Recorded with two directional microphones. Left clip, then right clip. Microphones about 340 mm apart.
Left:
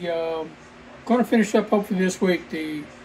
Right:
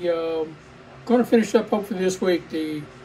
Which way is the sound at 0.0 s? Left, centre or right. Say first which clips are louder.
Right 2 dB; centre.